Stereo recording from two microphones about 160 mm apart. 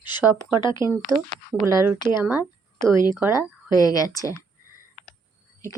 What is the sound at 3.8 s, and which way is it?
Speech, 20° left (ahead or behind).